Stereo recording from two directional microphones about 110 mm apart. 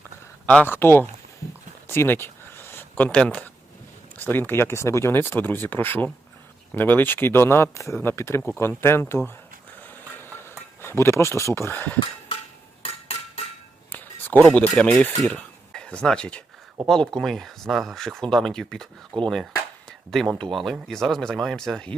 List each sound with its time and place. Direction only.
0.4 s speech: 15° left (ahead or behind)
1.9 s a sound: 20° left (ahead or behind)
4.2 s speech: 15° left (ahead or behind)
10.8 s speech: 20° left (ahead or behind)
12.8 s hammer: 65° left (ahead or behind)
13.9 s a sound: 15° left (ahead or behind)
14.7 s speech: 5° left (ahead or behind)